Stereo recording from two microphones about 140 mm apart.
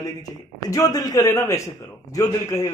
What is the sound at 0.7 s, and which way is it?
A man's voice, 25° left (ahead or behind).